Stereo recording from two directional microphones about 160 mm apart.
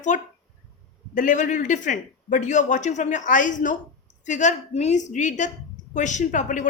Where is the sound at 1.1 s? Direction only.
55° left (ahead or behind).